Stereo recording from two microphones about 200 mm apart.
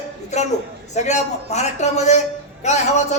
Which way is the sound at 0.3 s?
35° left (ahead or behind).